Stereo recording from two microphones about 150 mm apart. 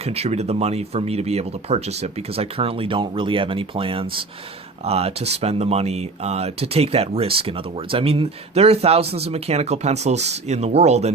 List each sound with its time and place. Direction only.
0.0 s speech: 45° right (ahead or behind)